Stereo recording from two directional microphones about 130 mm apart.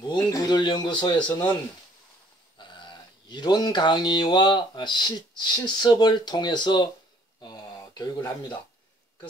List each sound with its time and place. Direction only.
0.0 s speech: 30° left (ahead or behind)
2.6 s livestock: 35° left (ahead or behind)
3.3 s speech: 35° left (ahead or behind)
7.4 s a sound: 30° left (ahead or behind)